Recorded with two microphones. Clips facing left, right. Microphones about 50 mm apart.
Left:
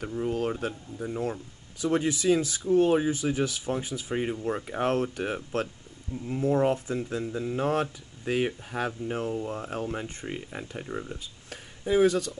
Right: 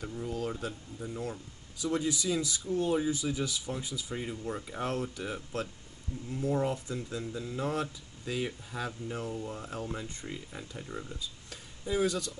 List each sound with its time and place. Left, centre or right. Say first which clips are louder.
0.2 s speech: left 7 dB; left
6.2 s speech: left 6 dB; left
10.9 s speech: left 6 dB; left
11.8 s speech: left 8 dB; left